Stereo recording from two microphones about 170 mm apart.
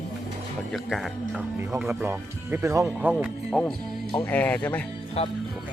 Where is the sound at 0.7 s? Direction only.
Centre (ahead or behind); by 3.1 s 15° right (ahead or behind).